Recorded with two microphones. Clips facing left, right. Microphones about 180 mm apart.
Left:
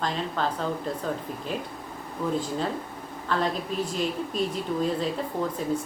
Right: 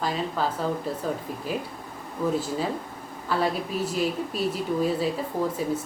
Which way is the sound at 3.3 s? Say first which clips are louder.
Right 1 dB; 5° right (ahead or behind).